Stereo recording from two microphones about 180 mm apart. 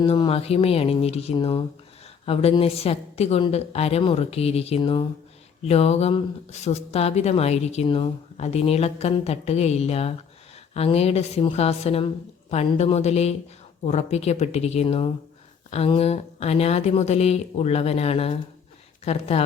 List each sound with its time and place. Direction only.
0.0 s speech: 30° left (ahead or behind)